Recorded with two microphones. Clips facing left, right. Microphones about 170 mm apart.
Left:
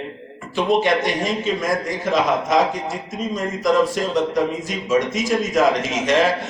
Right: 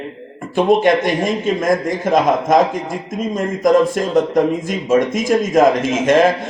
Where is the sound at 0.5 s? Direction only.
50° right (ahead or behind).